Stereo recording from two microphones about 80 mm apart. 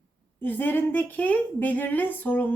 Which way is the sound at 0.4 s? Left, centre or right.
Left.